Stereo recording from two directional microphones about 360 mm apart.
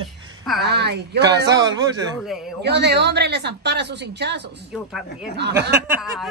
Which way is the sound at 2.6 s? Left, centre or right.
Right.